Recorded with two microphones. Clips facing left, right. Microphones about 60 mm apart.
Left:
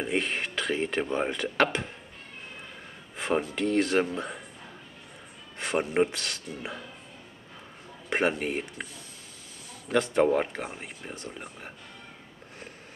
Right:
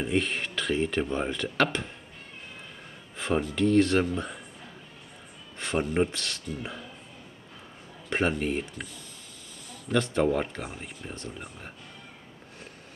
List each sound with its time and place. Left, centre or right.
0.0 s speech: centre
3.2 s speech: centre
5.6 s speech: centre
8.1 s speech: centre
9.8 s speech: centre